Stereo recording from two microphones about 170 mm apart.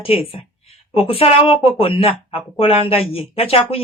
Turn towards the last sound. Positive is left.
turn(degrees=35)  # may be behind; listen again after turning